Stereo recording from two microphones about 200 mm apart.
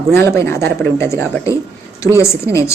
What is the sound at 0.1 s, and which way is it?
Speech, 10° left (ahead or behind).